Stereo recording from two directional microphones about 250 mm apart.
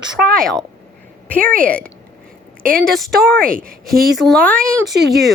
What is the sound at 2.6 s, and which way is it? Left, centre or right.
Speech, right.